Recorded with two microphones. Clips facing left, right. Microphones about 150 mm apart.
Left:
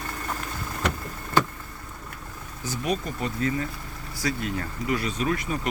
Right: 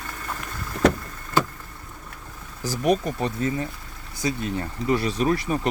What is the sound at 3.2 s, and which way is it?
Speech, 25° right (ahead or behind).